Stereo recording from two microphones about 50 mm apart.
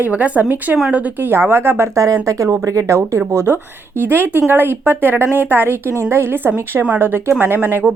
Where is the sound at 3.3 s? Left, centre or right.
Right.